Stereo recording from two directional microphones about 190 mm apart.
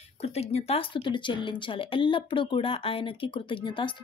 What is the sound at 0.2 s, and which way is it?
A woman's voice, 35° left (ahead or behind).